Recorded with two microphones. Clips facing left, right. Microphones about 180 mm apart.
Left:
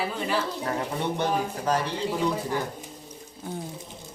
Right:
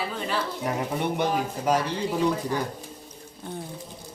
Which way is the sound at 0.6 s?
15° right (ahead or behind).